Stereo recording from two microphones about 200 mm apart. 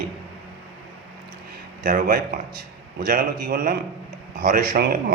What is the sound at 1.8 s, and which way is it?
Speech, 45° right (ahead or behind).